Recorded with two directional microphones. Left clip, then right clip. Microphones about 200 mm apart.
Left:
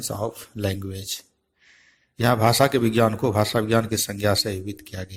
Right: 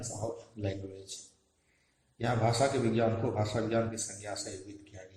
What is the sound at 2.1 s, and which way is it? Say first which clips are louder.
A man's voice: left 11 dB; 40° left (ahead or behind).